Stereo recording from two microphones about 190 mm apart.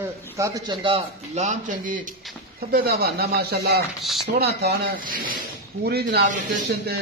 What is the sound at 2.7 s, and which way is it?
Speech, 55° right (ahead or behind).